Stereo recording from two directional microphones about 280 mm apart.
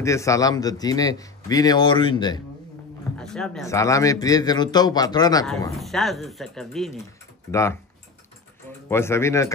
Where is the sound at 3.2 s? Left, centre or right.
Centre.